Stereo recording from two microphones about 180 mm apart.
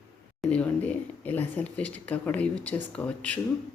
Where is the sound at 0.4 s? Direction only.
5° left (ahead or behind).